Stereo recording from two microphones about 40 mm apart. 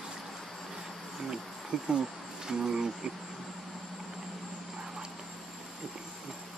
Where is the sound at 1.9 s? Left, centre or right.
Centre.